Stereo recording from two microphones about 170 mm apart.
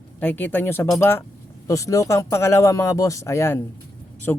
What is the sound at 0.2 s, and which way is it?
Speech, 10° left (ahead or behind).